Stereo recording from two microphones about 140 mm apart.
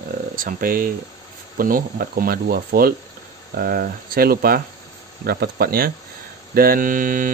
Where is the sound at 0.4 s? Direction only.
85° right.